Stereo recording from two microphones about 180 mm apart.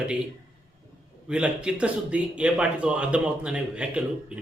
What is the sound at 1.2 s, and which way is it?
A man's voice, 5° right (ahead or behind).